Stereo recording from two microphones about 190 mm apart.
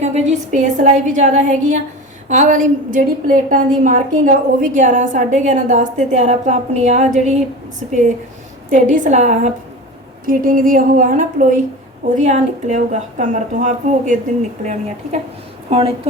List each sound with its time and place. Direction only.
0.0 s a woman's voice: 35° right (ahead or behind)